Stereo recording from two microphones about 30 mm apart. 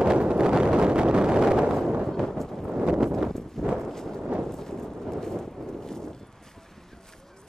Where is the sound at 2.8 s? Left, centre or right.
Centre.